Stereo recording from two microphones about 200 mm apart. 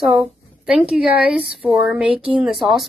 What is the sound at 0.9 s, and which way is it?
A woman's voice, 5° right (ahead or behind).